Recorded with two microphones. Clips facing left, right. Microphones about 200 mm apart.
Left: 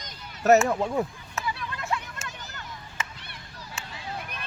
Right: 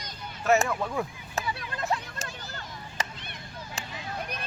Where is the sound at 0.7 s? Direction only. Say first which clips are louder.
Left 4 dB; 25° left (ahead or behind).